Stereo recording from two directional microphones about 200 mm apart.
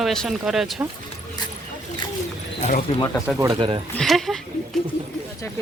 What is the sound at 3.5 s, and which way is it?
Speech, 25° right (ahead or behind).